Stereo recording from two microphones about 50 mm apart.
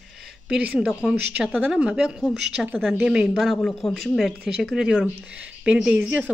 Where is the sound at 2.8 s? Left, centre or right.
Centre.